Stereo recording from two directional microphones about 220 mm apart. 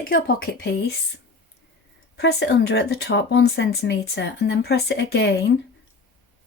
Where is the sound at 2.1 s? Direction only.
50° left (ahead or behind).